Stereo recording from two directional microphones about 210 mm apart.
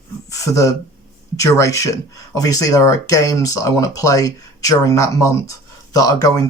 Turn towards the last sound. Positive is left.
turn(degrees=15)  # may be behind; listen again after turning